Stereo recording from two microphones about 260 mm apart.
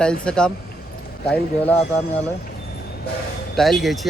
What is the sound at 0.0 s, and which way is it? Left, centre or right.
Speech, centre.